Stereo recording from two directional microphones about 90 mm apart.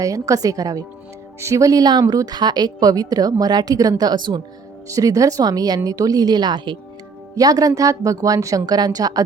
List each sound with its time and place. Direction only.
0.0 s a woman's voice: 40° right (ahead or behind)
4.9 s a woman's voice: 40° right (ahead or behind)
7.3 s a woman's voice: 40° right (ahead or behind)